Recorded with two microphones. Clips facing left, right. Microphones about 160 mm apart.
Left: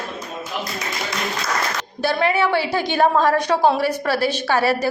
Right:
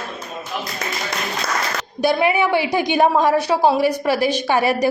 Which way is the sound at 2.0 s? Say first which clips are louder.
Right 2 dB; 15° right (ahead or behind).